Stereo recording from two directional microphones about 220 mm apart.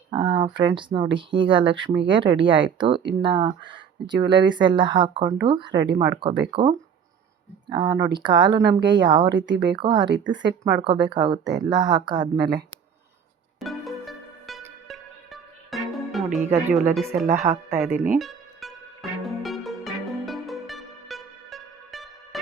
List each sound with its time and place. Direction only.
0.1 s speech: 20° right (ahead or behind)
13.6 s music: centre (ahead or behind)
16.5 s speech: 10° right (ahead or behind)
17.9 s speech: 40° right (ahead or behind)
18.2 s music: centre (ahead or behind)